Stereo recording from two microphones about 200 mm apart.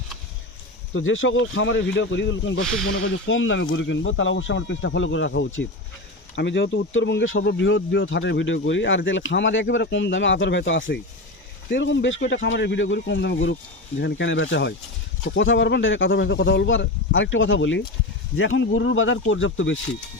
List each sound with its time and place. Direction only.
0.9 s speech: 80° left
6.3 s speech: 60° left (ahead or behind)